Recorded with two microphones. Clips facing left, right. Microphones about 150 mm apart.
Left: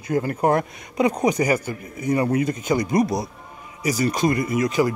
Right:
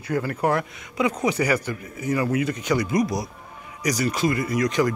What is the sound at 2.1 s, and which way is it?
Speech, 30° left (ahead or behind).